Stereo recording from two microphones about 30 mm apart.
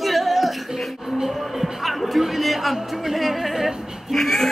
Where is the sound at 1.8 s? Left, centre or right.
Centre.